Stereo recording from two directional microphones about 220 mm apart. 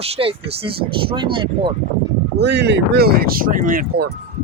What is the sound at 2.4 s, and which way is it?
Speech, 50° right (ahead or behind).